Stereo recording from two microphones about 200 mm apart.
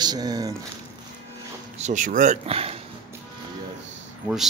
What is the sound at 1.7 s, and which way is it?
Speech, 35° right (ahead or behind).